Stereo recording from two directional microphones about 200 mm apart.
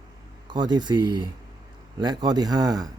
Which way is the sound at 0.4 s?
20° right (ahead or behind).